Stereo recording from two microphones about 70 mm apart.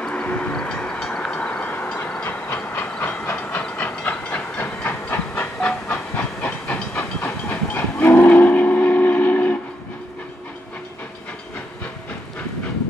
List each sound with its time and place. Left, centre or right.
0.0 s train: centre
2.4 s hiss: left
3.3 s train: left
3.6 s hiss: centre
7.2 s train: left